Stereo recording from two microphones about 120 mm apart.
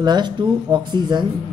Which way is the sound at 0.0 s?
40° right (ahead or behind).